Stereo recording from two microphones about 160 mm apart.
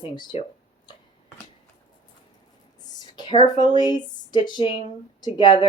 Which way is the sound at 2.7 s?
25° left (ahead or behind).